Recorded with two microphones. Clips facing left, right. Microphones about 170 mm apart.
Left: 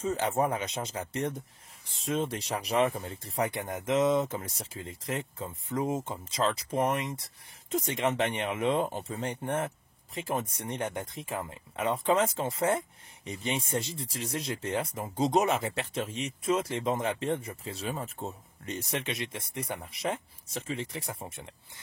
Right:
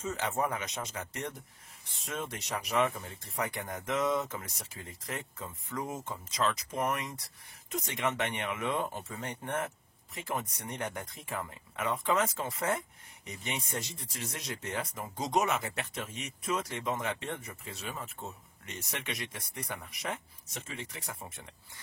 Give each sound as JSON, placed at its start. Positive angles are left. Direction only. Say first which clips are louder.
{"t": 0.0, "sound": "speech", "louder": "left 5 dB", "side_deg": 30}